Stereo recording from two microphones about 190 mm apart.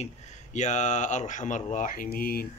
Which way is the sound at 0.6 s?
40° left (ahead or behind).